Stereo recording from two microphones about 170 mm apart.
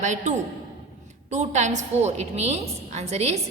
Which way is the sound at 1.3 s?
45° right (ahead or behind).